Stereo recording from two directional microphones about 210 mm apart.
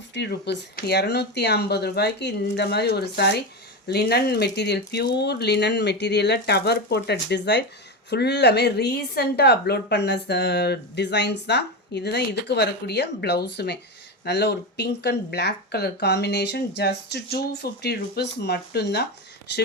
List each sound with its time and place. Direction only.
0.1 s a woman's voice: 55° left (ahead or behind)